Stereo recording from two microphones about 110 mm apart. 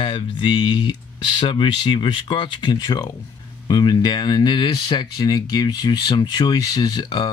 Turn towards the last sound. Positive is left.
turn(degrees=40)  # may be behind; listen again after turning